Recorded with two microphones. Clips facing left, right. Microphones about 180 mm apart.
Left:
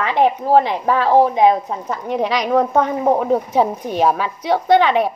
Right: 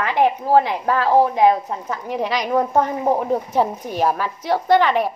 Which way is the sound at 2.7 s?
90° left.